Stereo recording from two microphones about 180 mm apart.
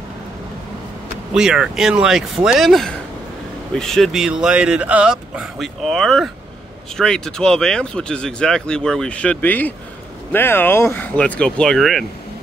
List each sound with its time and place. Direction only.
1.3 s speech: 5° right (ahead or behind)